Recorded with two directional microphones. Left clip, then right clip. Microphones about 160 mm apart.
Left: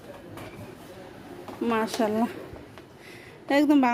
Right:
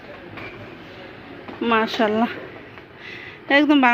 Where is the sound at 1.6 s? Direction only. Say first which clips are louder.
Right 7 dB; 20° left (ahead or behind).